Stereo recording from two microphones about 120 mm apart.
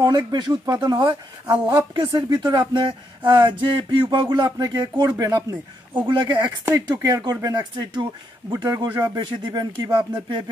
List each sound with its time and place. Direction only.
0.0 s speech: 35° right (ahead or behind)
6.6 s speech: 25° right (ahead or behind)